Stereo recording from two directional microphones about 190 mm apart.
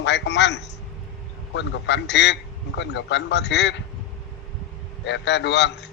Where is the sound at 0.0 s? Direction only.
65° left (ahead or behind).